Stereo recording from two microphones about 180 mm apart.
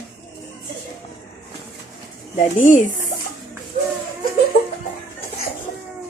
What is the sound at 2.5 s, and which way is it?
Speech, 45° left (ahead or behind).